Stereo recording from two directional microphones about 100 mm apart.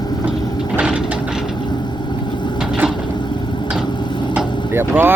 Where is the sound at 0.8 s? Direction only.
10° right (ahead or behind).